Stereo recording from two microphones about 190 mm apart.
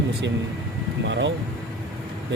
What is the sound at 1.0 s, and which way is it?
Vehicle, 70° right (ahead or behind).